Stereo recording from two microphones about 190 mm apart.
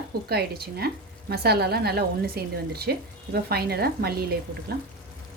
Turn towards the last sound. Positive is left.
turn(degrees=-55)  # may be behind; listen again after turning